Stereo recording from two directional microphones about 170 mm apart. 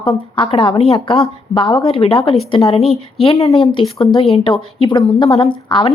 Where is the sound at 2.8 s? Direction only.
Centre (ahead or behind).